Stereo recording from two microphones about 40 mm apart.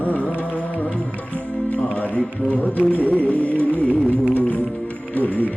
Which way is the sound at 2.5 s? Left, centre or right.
Left.